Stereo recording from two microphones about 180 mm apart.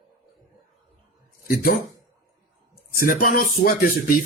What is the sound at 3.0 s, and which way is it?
Speech, 50° left (ahead or behind).